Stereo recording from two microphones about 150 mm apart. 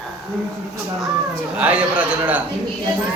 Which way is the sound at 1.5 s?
10° right (ahead or behind).